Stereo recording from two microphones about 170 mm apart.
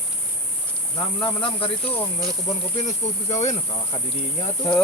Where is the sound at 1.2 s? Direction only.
30° left (ahead or behind).